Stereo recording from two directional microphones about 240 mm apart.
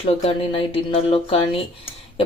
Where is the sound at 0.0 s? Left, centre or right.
Left.